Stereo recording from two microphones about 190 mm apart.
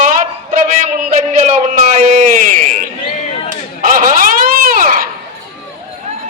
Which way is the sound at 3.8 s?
45° right (ahead or behind).